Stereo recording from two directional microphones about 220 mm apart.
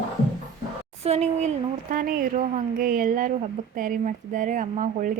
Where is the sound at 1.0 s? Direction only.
30° right (ahead or behind).